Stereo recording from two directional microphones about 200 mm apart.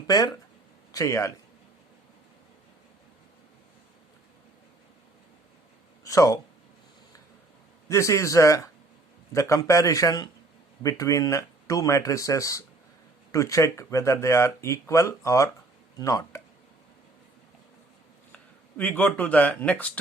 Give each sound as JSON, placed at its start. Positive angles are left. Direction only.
{"t": 0.1, "sound": "speech", "side_deg": 20}
{"t": 6.1, "sound": "speech", "side_deg": 15}
{"t": 7.9, "sound": "speech", "side_deg": 15}
{"t": 18.8, "sound": "speech", "side_deg": 10}